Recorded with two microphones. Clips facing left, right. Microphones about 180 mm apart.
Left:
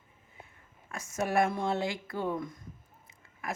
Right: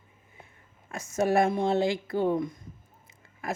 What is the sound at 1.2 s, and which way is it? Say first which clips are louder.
Speech: right 5 dB; 25° right (ahead or behind).